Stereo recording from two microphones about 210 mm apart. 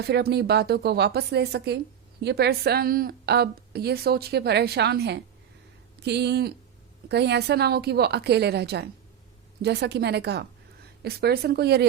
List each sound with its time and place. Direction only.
0.0 s a woman's voice: 50° right (ahead or behind)